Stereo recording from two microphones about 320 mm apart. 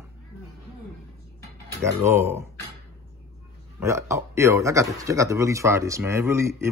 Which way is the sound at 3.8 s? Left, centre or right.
Centre.